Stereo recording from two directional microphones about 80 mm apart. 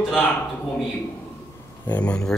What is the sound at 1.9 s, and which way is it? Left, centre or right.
Speech, centre.